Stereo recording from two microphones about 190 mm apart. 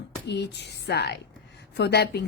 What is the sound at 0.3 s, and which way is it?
A woman's voice, 65° left (ahead or behind).